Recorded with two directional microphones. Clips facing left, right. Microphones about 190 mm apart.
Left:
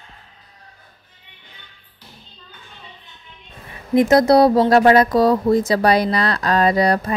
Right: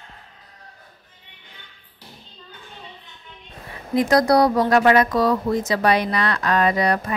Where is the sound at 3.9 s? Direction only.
20° left (ahead or behind).